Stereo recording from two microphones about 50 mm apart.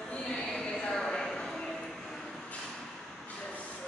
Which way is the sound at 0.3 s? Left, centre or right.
Centre.